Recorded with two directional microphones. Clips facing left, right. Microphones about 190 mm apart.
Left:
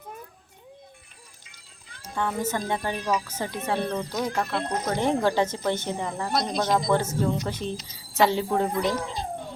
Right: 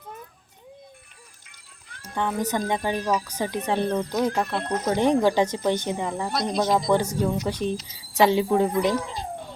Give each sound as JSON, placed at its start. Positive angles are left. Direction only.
{"t": 2.1, "sound": "speech", "side_deg": -15}
{"t": 3.0, "sound": "a woman's voice", "side_deg": -35}
{"t": 3.2, "sound": "speech", "side_deg": -15}
{"t": 6.3, "sound": "speech", "side_deg": -5}